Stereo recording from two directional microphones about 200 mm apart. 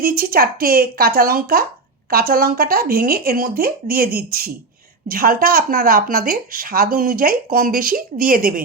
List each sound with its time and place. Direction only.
0.0 s speech: 45° right (ahead or behind)